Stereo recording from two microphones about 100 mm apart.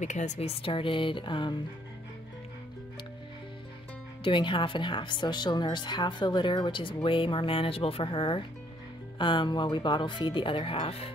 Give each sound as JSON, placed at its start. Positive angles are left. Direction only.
{"t": 0.4, "sound": "speech", "side_deg": 80}
{"t": 4.2, "sound": "speech", "side_deg": 55}